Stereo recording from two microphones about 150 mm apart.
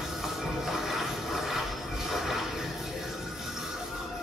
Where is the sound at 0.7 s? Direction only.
Centre (ahead or behind).